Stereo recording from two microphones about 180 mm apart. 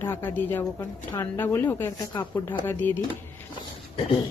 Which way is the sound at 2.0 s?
25° left (ahead or behind).